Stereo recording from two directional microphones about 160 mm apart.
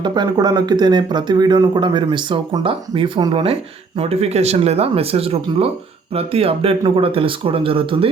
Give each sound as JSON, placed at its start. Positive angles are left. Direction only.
{"t": 0.0, "sound": "speech", "side_deg": -25}